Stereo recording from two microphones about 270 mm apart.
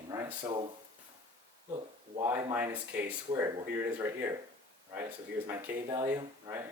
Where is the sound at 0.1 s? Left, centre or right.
Centre.